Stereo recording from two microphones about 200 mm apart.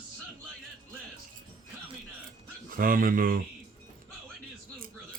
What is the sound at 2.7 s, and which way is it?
Speech, 45° right (ahead or behind).